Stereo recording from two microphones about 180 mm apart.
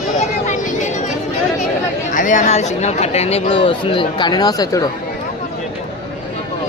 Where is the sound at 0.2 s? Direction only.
40° left (ahead or behind).